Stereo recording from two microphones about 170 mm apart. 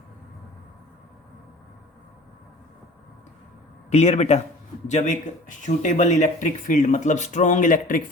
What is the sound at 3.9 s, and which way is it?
A man's voice, 40° left (ahead or behind).